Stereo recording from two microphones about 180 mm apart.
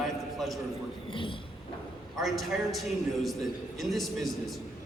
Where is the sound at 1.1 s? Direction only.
30° left (ahead or behind).